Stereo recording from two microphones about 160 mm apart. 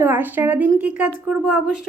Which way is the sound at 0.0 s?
15° right (ahead or behind).